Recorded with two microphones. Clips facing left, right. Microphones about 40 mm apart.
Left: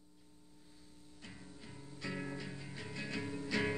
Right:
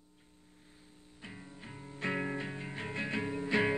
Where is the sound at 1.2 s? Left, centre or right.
Right.